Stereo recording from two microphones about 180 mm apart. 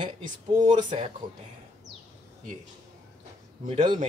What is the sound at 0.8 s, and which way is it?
Speech, 35° right (ahead or behind).